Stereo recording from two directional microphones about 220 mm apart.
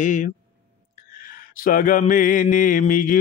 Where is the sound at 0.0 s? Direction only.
35° left (ahead or behind).